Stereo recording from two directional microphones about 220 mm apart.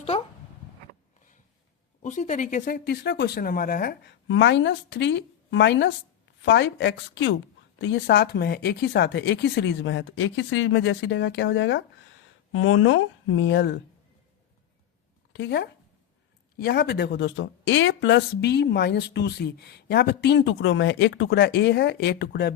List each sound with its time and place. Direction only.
2.0 s speech: 30° left (ahead or behind); by 13.7 s 50° left (ahead or behind)
15.3 s speech: 55° left (ahead or behind)